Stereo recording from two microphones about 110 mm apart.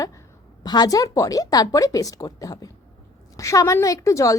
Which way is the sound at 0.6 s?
40° left (ahead or behind).